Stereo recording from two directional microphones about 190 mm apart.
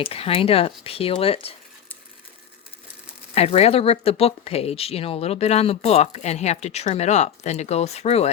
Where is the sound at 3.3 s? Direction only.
35° left (ahead or behind).